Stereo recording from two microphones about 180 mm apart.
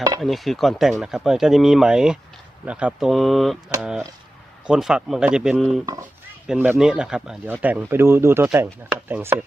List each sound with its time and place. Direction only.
0.2 s speech: centre (ahead or behind)
5.8 s speech: 20° right (ahead or behind)
6.5 s speech: 5° right (ahead or behind)